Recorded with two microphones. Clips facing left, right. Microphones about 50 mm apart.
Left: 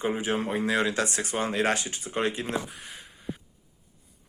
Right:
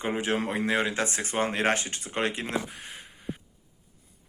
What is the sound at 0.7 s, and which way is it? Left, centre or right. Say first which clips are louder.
Speech: left 1 dB; right.